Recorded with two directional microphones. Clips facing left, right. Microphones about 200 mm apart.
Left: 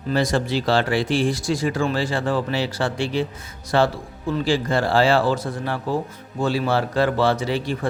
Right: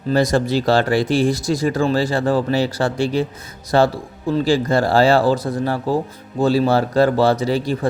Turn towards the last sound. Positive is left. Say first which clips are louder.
# right 4 dB
turn(degrees=-40)  # may be behind; listen again after turning